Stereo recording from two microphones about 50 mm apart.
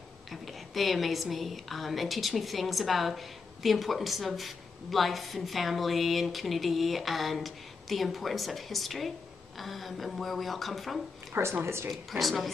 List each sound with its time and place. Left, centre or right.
0.3 s a woman's voice: centre
11.6 s speech: right
11.9 s a woman's voice: centre